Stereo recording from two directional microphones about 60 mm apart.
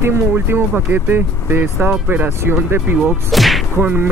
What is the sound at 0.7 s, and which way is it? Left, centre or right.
Speech, right.